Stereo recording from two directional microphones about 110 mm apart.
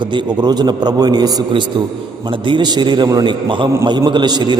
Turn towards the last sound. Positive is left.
turn(degrees=-40)  # may be behind; listen again after turning